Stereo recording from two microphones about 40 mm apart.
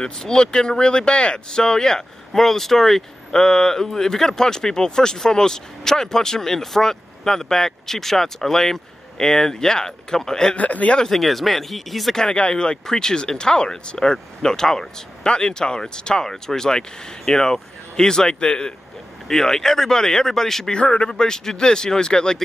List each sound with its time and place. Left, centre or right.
0.0 s speech: centre
3.3 s speech: centre
10.5 s speech: left
11.1 s speech: centre
12.2 s speech: left
20.7 s speech: left